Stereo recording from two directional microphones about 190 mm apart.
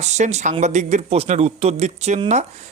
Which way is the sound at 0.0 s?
35° right (ahead or behind).